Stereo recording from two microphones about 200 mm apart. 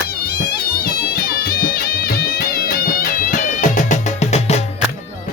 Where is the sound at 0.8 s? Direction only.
50° left (ahead or behind); by 4.6 s 35° left (ahead or behind).